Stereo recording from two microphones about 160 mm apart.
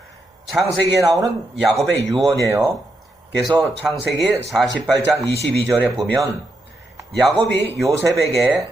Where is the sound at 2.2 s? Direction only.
20° right (ahead or behind).